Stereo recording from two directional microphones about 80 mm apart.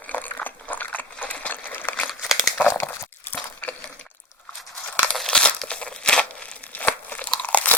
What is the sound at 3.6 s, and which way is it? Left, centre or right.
Water, centre.